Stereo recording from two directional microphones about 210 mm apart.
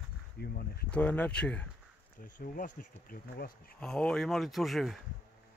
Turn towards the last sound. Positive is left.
turn(degrees=0)  # may be behind; listen again after turning